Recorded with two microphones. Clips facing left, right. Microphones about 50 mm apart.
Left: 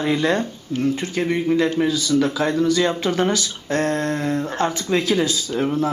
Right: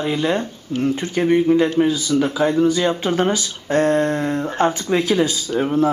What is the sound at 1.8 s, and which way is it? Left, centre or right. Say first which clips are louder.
Speech: right 1 dB; right.